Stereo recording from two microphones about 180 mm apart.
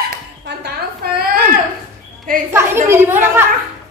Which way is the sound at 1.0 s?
60° right (ahead or behind).